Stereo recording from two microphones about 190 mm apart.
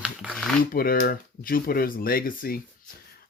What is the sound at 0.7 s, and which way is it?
Speech, 50° left (ahead or behind).